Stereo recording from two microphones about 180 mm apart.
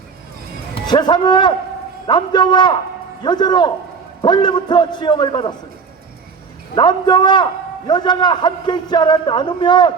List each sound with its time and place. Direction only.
0.9 s a man's voice: 25° left (ahead or behind)
6.7 s a man's voice: 25° left (ahead or behind)